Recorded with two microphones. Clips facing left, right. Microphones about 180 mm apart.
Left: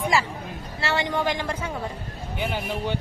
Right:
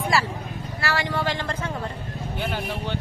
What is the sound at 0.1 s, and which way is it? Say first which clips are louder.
Speech: even; 15° left (ahead or behind).